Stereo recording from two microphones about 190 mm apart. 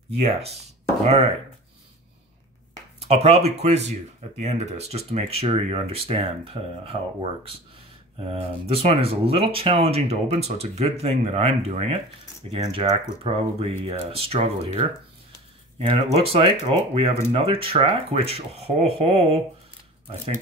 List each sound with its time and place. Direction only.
0.2 s speech: 30° right (ahead or behind)
3.0 s speech: 30° right (ahead or behind)
15.8 s speech: 30° right (ahead or behind)